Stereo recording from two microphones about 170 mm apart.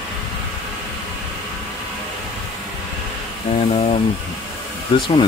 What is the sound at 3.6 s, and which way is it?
Speech, 35° left (ahead or behind).